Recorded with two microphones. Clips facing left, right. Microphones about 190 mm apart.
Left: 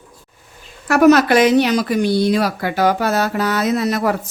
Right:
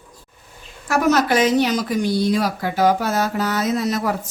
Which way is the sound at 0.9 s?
65° left (ahead or behind).